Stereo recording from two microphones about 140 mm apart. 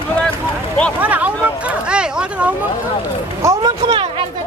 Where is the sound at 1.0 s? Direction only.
10° right (ahead or behind).